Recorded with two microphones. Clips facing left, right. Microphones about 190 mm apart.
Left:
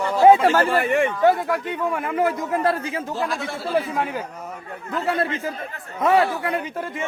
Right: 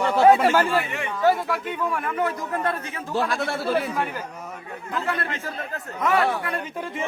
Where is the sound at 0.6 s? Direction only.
50° left (ahead or behind).